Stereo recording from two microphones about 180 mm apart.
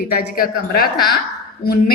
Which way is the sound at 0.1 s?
55° left (ahead or behind).